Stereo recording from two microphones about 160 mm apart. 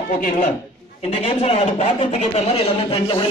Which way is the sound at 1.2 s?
40° left (ahead or behind).